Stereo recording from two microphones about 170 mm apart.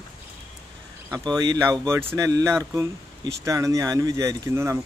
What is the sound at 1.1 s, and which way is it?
Speech, 25° right (ahead or behind).